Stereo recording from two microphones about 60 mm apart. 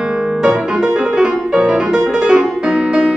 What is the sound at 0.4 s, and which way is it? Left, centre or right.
Music, centre.